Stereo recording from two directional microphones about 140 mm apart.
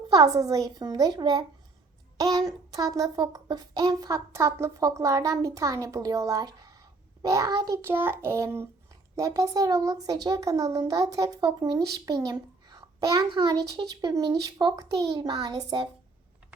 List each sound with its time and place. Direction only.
0.1 s speech: 25° right (ahead or behind)